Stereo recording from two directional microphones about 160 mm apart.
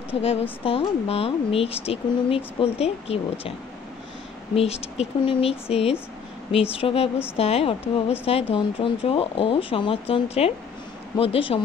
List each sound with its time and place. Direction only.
0.1 s speech: 40° left (ahead or behind)
4.6 s speech: 40° left (ahead or behind)